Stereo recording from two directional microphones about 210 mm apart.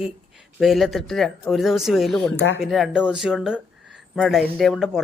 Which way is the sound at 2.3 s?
55° left (ahead or behind).